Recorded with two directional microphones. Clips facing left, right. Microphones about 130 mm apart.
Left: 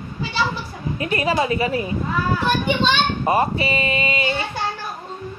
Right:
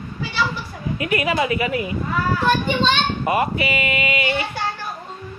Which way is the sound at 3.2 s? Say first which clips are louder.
Left 1 dB; 30° left (ahead or behind).